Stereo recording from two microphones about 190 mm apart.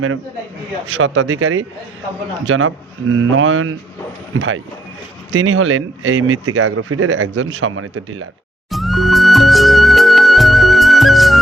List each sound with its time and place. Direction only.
0.9 s speech: 85° right
8.7 s music: centre (ahead or behind)